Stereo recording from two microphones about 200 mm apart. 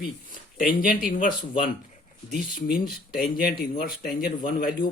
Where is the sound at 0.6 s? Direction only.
45° left (ahead or behind).